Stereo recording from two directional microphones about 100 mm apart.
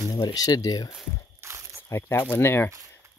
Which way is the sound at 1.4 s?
25° right (ahead or behind).